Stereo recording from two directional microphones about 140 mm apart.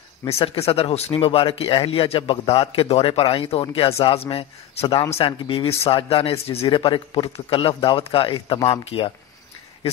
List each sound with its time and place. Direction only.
0.4 s a man's voice: 45° left (ahead or behind)